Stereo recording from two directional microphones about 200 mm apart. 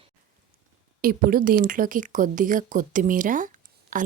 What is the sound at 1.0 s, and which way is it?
A woman's voice, 45° right (ahead or behind).